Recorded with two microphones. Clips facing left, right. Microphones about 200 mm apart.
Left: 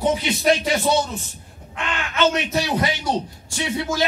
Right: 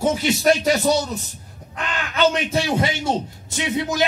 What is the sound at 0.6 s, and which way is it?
A man's voice, 40° right (ahead or behind).